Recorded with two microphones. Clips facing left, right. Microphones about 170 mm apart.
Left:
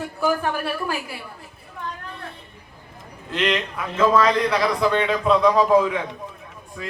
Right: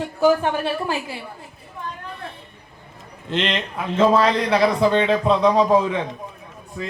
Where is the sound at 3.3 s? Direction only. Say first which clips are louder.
Even; 25° right (ahead or behind).